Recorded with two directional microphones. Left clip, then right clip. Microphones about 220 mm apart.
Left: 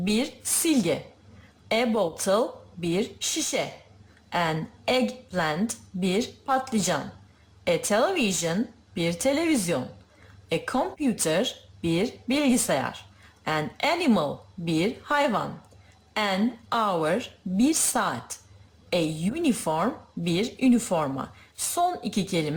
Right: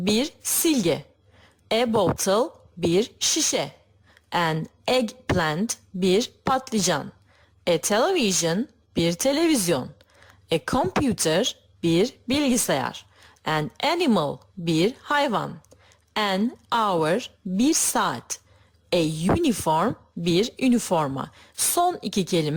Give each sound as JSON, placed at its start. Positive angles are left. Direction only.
{"t": 0.0, "sound": "a woman's voice", "side_deg": -40}